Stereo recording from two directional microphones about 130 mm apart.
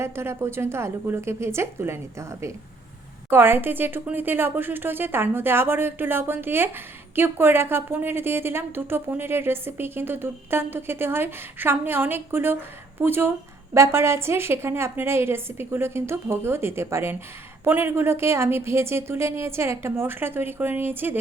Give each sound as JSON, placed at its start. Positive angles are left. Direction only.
{"t": 0.0, "sound": "a woman's voice", "side_deg": -20}